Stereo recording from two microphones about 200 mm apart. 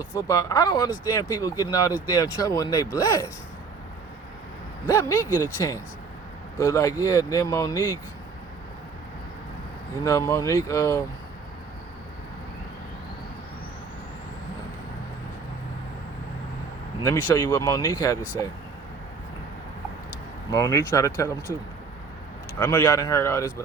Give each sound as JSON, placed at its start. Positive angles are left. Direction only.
{"t": 0.2, "sound": "speech", "side_deg": 15}
{"t": 4.9, "sound": "speech", "side_deg": 15}
{"t": 10.0, "sound": "speech", "side_deg": 15}
{"t": 17.0, "sound": "speech", "side_deg": 15}
{"t": 20.5, "sound": "speech", "side_deg": 20}
{"t": 22.5, "sound": "speech", "side_deg": 15}